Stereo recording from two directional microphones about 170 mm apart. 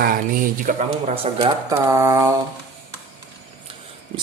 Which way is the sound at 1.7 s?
15° right (ahead or behind).